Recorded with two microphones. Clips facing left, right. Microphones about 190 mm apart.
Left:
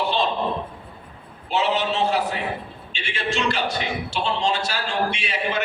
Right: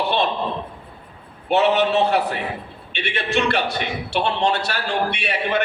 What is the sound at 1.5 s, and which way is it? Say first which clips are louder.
A man's voice: right 5 dB; 60° right (ahead or behind).